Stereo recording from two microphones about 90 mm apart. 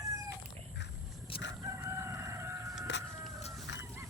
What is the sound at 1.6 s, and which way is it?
Crowing, 35° right (ahead or behind).